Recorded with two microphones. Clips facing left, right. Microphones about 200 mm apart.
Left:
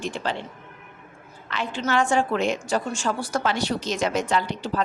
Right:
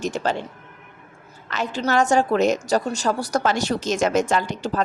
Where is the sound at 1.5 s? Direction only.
40° right (ahead or behind).